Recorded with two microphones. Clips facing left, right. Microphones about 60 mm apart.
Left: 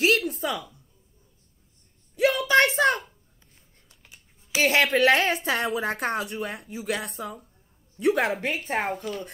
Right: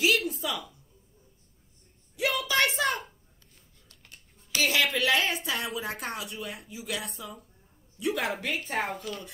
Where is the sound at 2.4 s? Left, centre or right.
Left.